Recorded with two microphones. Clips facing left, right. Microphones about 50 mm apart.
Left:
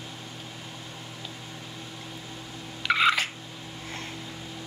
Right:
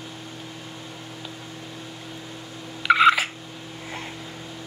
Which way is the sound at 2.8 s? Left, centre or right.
Centre.